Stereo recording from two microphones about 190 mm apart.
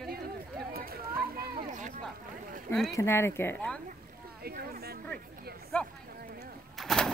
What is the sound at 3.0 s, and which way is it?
Speech, 10° left (ahead or behind).